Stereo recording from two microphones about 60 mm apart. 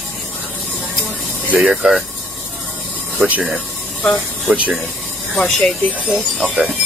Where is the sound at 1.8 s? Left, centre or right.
Centre.